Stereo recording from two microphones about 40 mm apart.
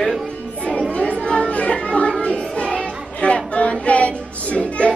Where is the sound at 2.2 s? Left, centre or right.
Left.